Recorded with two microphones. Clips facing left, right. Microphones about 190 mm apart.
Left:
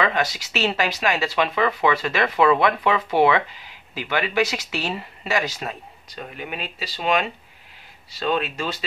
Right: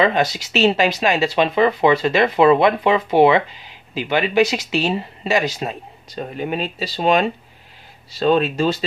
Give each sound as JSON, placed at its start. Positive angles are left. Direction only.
{"t": 0.0, "sound": "speech", "side_deg": -25}
{"t": 6.1, "sound": "speech", "side_deg": -35}